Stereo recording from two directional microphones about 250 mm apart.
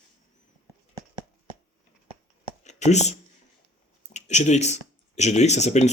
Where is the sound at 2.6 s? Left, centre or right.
Left.